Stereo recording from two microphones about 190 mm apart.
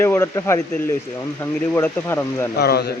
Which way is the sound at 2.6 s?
55° left (ahead or behind).